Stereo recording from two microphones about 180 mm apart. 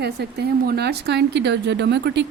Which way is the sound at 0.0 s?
65° right (ahead or behind).